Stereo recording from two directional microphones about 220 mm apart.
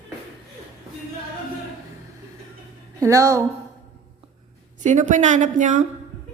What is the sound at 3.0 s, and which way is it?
Speech, 15° right (ahead or behind).